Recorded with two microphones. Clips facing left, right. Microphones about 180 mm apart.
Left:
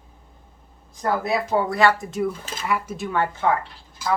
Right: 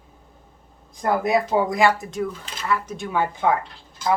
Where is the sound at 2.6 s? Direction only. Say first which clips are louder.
Even; 10° left (ahead or behind).